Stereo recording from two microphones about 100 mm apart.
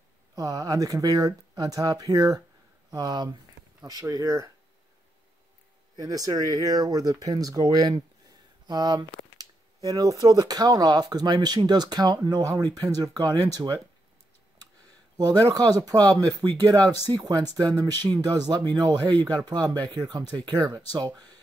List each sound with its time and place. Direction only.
0.4 s speech: 35° right (ahead or behind)
5.9 s speech: 35° right (ahead or behind)
15.1 s speech: 35° right (ahead or behind)